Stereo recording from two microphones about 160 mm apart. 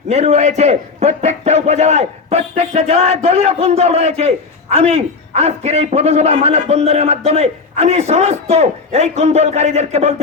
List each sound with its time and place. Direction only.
0.1 s a man's voice: 45° right (ahead or behind)